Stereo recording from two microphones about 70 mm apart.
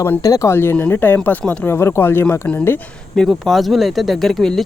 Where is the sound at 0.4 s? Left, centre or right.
Left.